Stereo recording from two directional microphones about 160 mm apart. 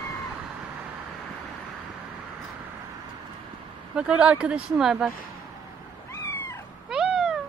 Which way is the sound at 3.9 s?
5° right (ahead or behind).